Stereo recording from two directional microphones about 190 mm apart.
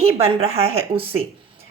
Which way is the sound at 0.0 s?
35° right (ahead or behind).